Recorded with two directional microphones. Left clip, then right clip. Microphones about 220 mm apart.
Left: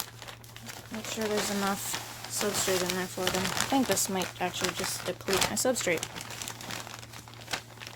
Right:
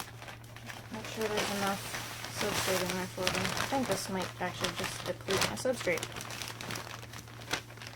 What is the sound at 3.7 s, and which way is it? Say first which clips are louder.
Speech: left 5 dB; 50° left (ahead or behind).